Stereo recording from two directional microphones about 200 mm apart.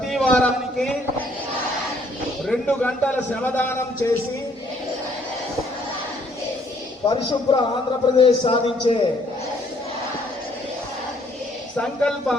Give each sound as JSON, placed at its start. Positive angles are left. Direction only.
{"t": 0.1, "sound": "a man's voice", "side_deg": 0}
{"t": 2.5, "sound": "a man's voice", "side_deg": 5}
{"t": 7.1, "sound": "a man's voice", "side_deg": 25}
{"t": 11.8, "sound": "speech", "side_deg": 5}